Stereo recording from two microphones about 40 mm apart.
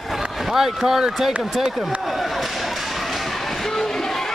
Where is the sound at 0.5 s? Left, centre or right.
Centre.